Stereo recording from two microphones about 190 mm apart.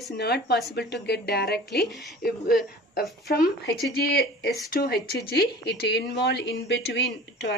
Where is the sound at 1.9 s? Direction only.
Centre (ahead or behind).